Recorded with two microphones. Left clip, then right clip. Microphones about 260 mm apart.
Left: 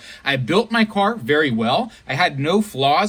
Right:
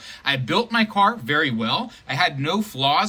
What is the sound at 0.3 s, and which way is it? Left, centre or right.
Speech, centre.